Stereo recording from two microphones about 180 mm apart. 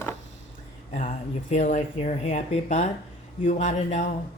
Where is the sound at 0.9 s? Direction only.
40° left (ahead or behind).